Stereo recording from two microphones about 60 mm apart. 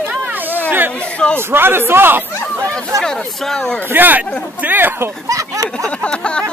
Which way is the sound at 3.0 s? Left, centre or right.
Centre.